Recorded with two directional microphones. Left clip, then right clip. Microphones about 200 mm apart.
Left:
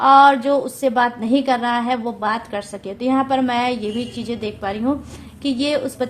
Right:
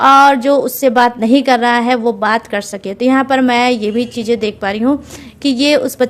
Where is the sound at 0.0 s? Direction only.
45° right (ahead or behind).